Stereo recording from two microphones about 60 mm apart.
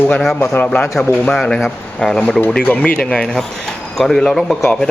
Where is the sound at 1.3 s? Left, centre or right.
Centre.